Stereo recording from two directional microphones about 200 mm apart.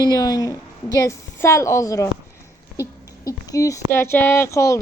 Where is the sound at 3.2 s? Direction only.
15° left (ahead or behind).